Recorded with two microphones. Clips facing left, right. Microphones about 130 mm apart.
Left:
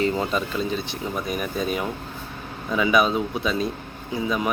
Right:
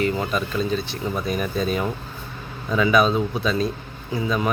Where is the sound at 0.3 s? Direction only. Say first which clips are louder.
Right 2 dB; 20° left (ahead or behind).